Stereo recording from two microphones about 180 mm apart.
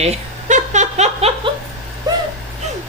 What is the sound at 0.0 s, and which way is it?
Giggle, 40° right (ahead or behind).